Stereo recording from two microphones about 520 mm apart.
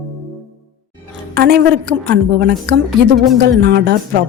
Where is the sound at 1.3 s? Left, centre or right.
Centre.